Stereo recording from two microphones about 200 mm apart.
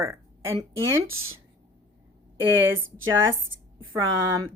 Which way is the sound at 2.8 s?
80° right.